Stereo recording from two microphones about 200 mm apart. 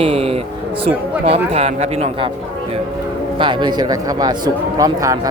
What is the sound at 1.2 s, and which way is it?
A man's voice, 30° right (ahead or behind).